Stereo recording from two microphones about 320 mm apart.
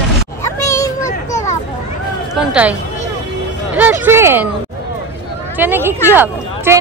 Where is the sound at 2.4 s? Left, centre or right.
Centre.